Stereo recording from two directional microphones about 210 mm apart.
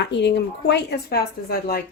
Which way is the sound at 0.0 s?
55° left (ahead or behind).